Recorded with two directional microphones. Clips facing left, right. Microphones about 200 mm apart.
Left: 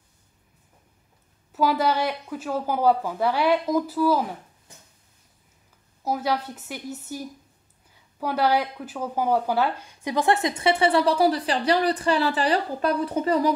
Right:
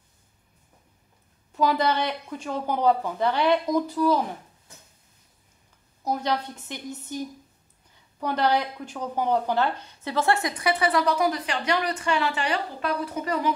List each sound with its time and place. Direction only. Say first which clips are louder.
1.5 s speech: left 1 dB; 5° left (ahead or behind)
6.0 s a woman's voice: left 1 dB; 5° left (ahead or behind); by 13.6 s 35° left (ahead or behind)